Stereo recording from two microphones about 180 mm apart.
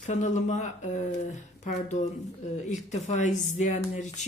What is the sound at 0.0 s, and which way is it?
Speech, 40° left (ahead or behind).